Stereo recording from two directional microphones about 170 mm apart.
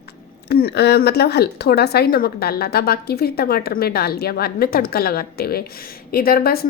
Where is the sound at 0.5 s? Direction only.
70° left (ahead or behind).